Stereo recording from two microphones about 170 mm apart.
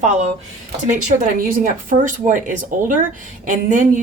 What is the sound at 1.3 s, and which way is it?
A woman's voice, 55° right (ahead or behind).